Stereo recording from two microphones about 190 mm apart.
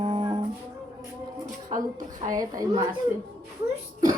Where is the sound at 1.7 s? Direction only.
45° right (ahead or behind).